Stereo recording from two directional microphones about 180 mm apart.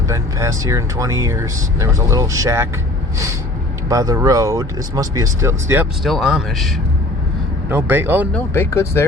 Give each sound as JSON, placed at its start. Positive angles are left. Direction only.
{"t": 0.1, "sound": "speech", "side_deg": -15}
{"t": 3.8, "sound": "speech", "side_deg": -20}
{"t": 7.7, "sound": "speech", "side_deg": -10}
{"t": 8.3, "sound": "speech", "side_deg": 15}